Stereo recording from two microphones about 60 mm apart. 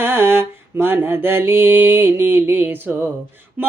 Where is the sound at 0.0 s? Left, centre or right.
Right.